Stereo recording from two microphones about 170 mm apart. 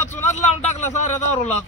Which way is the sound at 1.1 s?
15° left (ahead or behind).